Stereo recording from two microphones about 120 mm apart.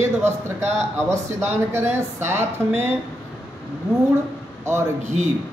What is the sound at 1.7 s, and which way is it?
Speech, 20° right (ahead or behind).